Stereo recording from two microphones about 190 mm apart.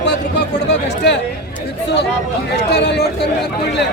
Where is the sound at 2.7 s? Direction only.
60° left (ahead or behind).